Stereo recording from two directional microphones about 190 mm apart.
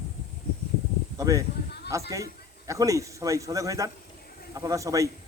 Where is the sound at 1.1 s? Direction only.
15° right (ahead or behind).